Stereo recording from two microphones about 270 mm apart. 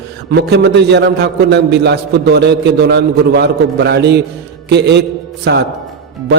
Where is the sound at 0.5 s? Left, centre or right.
Right.